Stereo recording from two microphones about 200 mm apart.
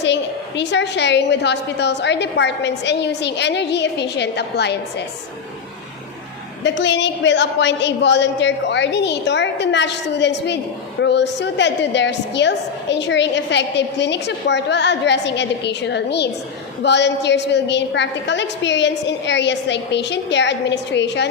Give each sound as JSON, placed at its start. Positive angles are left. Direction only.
{"t": 0.0, "sound": "a woman's voice", "side_deg": 60}
{"t": 6.6, "sound": "a woman's voice", "side_deg": 65}